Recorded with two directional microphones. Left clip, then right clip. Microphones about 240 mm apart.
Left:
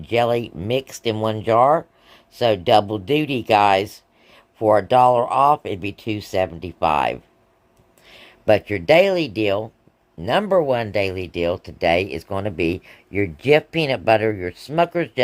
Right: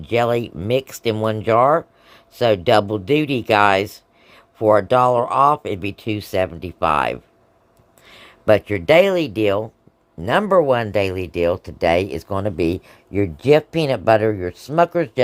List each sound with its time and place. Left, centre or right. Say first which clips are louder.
0.0 s speech: right 1 dB; centre